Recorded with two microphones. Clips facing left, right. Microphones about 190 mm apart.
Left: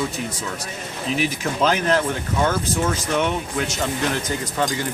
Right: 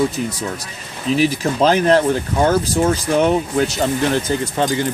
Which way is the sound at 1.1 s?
35° right (ahead or behind).